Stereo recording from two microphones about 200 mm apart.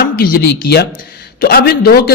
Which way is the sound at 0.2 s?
50° left (ahead or behind).